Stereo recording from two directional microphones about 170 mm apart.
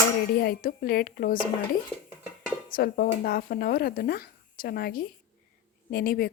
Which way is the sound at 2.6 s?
55° left (ahead or behind).